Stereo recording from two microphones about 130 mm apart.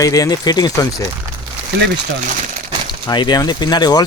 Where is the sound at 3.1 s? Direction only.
35° left (ahead or behind).